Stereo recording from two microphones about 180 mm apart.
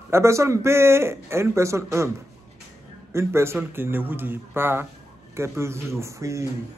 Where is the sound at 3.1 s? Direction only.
15° right (ahead or behind).